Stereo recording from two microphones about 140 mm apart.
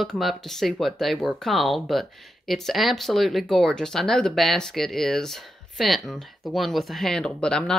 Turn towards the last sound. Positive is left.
turn(degrees=5)  # may be behind; listen again after turning